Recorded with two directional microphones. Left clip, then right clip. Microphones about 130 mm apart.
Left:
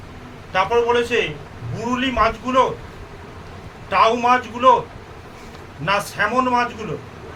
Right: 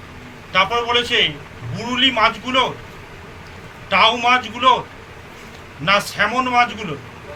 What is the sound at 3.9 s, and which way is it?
Speech, 90° left.